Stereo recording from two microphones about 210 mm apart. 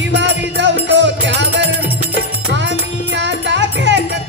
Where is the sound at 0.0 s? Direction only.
55° right (ahead or behind).